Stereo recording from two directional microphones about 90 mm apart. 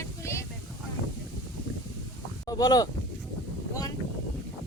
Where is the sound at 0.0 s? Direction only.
30° left (ahead or behind).